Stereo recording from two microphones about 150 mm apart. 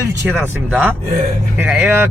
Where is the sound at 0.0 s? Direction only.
15° right (ahead or behind).